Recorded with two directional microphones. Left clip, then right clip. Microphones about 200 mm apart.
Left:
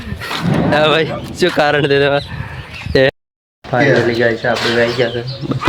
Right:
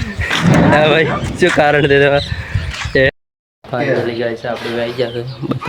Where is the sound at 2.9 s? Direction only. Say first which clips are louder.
Left 1 dB; 30° left (ahead or behind).